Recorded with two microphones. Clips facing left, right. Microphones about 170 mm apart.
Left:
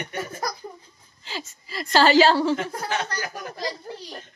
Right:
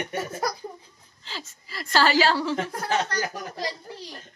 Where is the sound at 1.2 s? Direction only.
10° left (ahead or behind).